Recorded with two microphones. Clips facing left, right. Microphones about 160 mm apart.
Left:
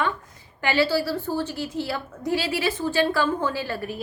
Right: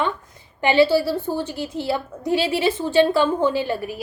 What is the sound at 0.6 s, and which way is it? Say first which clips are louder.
A woman's voice: right 6 dB; 20° right (ahead or behind).